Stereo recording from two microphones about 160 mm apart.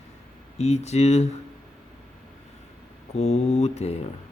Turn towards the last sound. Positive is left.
turn(degrees=40)  # may be behind; listen again after turning